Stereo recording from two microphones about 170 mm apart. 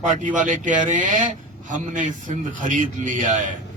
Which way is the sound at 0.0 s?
45° right (ahead or behind).